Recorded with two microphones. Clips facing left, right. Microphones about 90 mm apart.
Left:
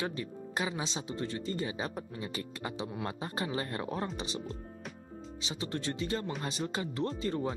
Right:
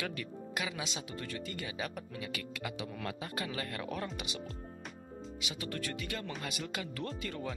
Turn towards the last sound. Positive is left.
turn(degrees=30)  # may be behind; listen again after turning